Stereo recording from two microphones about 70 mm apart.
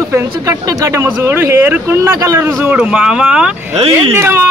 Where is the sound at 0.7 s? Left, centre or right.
Right.